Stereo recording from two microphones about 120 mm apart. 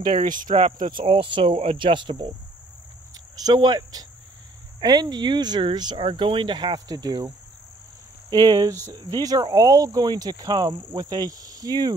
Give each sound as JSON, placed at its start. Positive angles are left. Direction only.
{"t": 0.1, "sound": "speech", "side_deg": -90}
{"t": 0.8, "sound": "speech", "side_deg": -45}
{"t": 3.3, "sound": "speech", "side_deg": -35}